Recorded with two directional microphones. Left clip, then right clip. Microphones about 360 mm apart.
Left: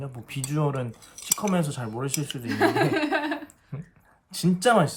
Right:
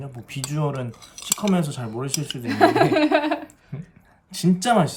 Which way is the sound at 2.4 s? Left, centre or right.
Centre.